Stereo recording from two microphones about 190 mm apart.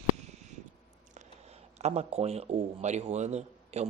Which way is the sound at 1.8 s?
35° right (ahead or behind).